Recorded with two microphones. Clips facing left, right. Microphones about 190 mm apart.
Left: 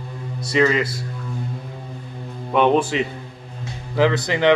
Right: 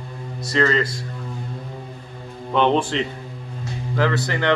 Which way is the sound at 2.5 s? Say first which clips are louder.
Left 2 dB; 10° left (ahead or behind).